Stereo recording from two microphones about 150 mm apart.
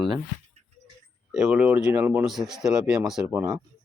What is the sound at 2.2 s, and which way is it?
Speech, centre (ahead or behind).